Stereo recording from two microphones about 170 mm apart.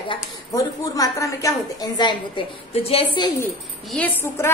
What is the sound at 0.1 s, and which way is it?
A woman's voice, 20° left (ahead or behind).